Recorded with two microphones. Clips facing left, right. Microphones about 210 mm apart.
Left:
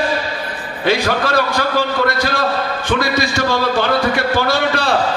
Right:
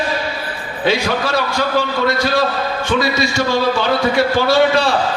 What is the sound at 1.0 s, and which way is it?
Speech, 55° left (ahead or behind).